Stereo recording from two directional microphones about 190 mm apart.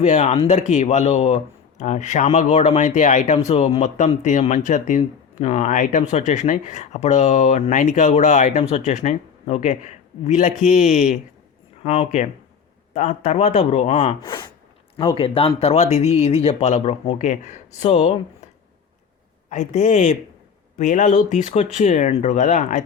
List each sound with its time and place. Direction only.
0.0 s speech: 35° left (ahead or behind)
19.5 s speech: 40° left (ahead or behind)